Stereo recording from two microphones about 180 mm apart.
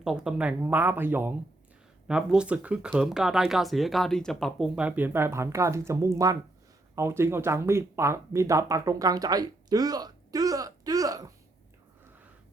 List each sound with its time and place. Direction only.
0.0 s speech: 5° right (ahead or behind); by 11.3 s 20° right (ahead or behind)